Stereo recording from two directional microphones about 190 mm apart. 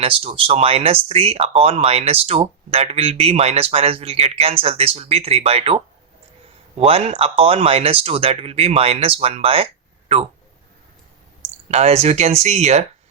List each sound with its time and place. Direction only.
0.0 s speech: 30° right (ahead or behind)
11.7 s speech: 35° right (ahead or behind)